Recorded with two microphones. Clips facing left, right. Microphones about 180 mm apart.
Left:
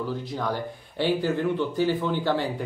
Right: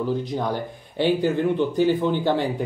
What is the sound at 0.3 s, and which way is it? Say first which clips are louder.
Speech: right 3 dB; 20° right (ahead or behind).